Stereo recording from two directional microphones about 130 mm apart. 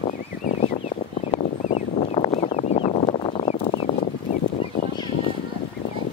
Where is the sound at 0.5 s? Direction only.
55° left (ahead or behind).